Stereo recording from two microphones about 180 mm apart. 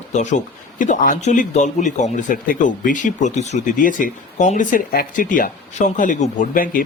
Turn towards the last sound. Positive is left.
turn(degrees=50)  # may be behind; listen again after turning